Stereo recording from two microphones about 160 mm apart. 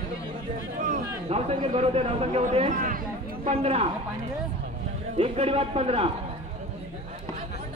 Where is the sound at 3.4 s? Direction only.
40° right (ahead or behind).